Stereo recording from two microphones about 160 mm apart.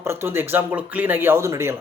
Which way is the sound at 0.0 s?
15° right (ahead or behind).